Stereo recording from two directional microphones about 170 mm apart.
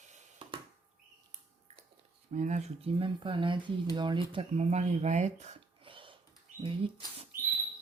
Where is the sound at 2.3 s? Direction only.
45° right (ahead or behind).